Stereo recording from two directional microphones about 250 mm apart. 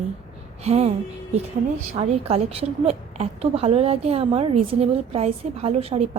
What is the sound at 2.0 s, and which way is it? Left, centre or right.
A woman's voice, right.